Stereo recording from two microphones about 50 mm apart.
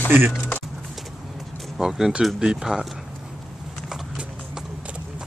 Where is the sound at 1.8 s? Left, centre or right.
Centre.